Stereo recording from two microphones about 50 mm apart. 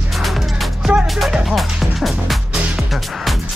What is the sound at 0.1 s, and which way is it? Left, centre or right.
Music, centre.